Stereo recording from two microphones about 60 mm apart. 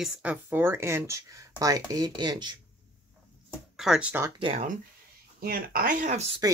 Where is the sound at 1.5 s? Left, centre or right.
Right.